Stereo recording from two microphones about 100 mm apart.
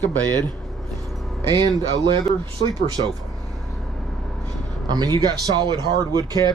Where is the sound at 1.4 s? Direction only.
40° right (ahead or behind).